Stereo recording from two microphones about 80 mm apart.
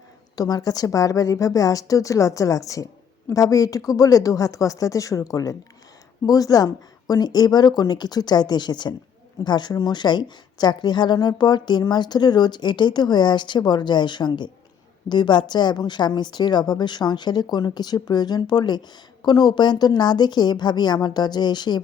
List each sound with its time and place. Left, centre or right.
0.3 s a woman's voice: left